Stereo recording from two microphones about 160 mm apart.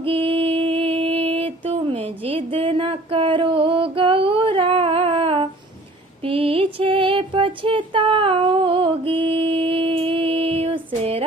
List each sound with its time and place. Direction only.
0.0 s mantra: 35° right (ahead or behind)
0.9 s a sound: 40° right (ahead or behind)
6.2 s female singing: 35° right (ahead or behind)